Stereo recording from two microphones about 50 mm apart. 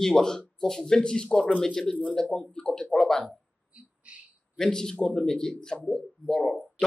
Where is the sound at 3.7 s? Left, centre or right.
Right.